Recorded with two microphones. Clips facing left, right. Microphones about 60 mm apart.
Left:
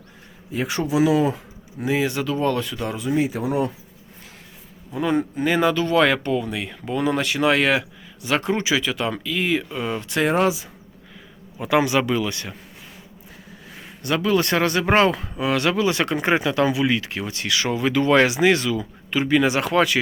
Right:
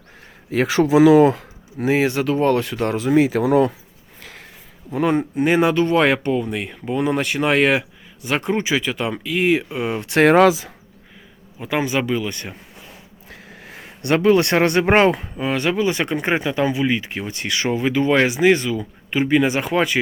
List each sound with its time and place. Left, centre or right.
0.5 s speech: right
1.2 s a sound: right
1.9 s speech: right
4.2 s a sound: right
4.9 s speech: right
10.1 s speech: right
10.3 s speech: right
11.6 s speech: centre
13.3 s a sound: right
14.8 s speech: right
18.2 s speech: centre
18.5 s speech: right